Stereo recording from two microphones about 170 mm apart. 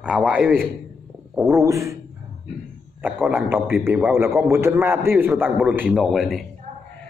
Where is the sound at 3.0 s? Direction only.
10° right (ahead or behind).